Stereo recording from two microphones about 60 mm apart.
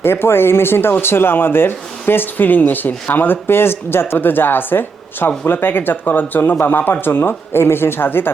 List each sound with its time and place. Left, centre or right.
0.0 s speech: left